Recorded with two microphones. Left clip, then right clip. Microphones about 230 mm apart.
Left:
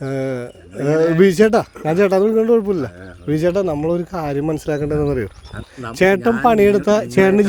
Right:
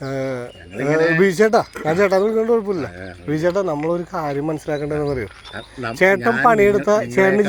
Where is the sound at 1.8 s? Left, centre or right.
Left.